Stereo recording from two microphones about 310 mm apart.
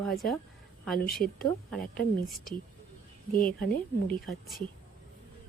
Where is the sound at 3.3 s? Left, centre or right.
Left.